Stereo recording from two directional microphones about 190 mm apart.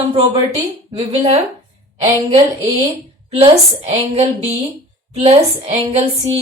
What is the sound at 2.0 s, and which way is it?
Speech, 30° right (ahead or behind).